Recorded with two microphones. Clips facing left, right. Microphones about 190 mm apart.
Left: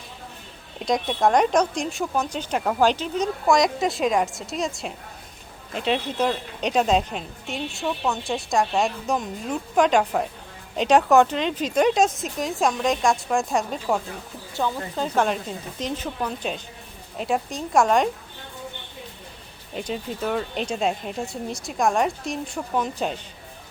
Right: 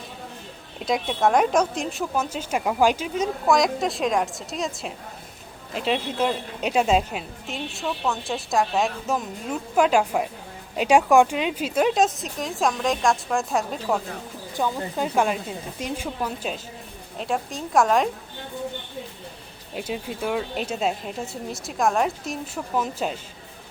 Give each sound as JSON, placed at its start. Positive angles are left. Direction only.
{"t": 0.9, "sound": "a woman's voice", "side_deg": -5}
{"t": 14.5, "sound": "a woman's voice", "side_deg": -15}
{"t": 19.7, "sound": "a woman's voice", "side_deg": -5}